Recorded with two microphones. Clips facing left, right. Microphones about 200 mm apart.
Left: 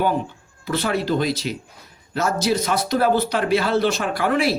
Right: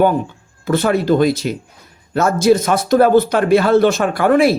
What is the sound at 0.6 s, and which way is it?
Speech, 50° right (ahead or behind).